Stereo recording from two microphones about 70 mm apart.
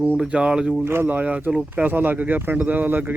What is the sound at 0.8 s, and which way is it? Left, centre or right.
Speech, right.